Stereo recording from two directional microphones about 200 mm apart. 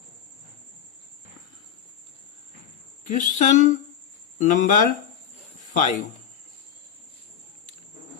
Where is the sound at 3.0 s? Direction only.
40° left (ahead or behind).